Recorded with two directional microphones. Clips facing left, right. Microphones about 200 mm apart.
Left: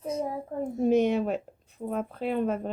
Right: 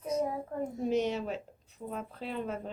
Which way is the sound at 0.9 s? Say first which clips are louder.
Left 8 dB; 55° left (ahead or behind).